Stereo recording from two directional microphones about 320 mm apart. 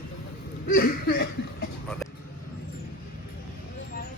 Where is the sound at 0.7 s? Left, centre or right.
Left.